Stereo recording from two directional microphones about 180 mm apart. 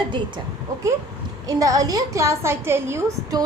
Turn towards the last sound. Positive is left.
turn(degrees=-15)  # may be behind; listen again after turning